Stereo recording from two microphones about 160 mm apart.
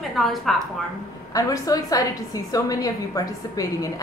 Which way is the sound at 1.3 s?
20° left (ahead or behind).